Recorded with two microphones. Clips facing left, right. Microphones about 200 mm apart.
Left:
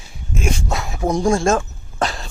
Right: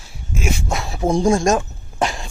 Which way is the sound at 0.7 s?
25° right (ahead or behind).